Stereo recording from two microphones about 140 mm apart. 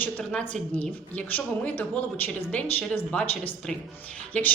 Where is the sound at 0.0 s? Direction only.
10° left (ahead or behind).